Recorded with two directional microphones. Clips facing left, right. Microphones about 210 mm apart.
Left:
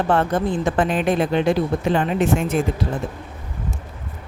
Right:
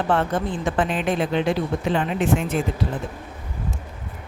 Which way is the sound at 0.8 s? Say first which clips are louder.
Left 2 dB; 40° left (ahead or behind).